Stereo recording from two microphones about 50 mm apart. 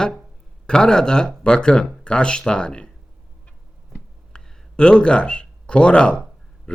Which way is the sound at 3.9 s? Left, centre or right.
Centre.